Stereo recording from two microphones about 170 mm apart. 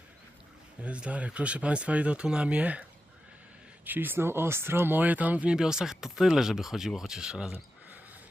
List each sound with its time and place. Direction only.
0.8 s speech: 5° right (ahead or behind)
3.8 s speech: 10° right (ahead or behind)